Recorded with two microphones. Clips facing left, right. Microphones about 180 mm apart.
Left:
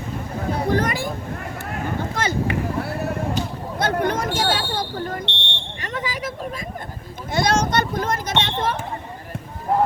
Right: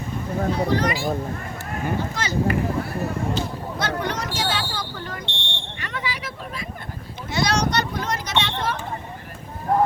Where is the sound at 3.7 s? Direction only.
50° left (ahead or behind).